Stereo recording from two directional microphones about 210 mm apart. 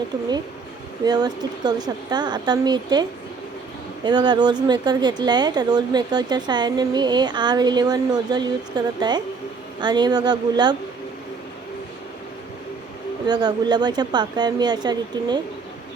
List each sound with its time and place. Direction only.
1.0 s speech: 20° right (ahead or behind)
13.2 s speech: 20° right (ahead or behind)